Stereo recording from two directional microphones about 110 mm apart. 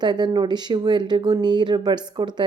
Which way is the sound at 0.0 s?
40° right (ahead or behind).